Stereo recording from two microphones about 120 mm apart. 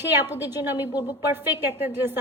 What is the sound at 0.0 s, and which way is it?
A woman's voice, 20° right (ahead or behind).